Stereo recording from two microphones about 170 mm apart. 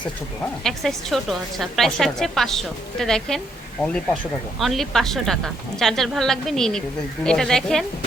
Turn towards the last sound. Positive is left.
turn(degrees=5)  # may be behind; listen again after turning